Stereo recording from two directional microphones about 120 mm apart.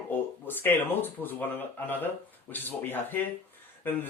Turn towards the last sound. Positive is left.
turn(degrees=15)  # may be behind; listen again after turning